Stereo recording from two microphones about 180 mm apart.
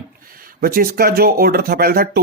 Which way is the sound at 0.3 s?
55° right (ahead or behind).